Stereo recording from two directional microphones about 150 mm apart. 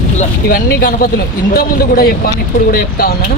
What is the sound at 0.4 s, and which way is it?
Speech, 80° left.